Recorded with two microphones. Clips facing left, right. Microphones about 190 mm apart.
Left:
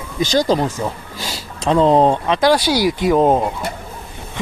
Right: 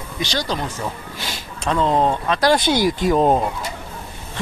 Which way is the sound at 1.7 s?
35° left (ahead or behind).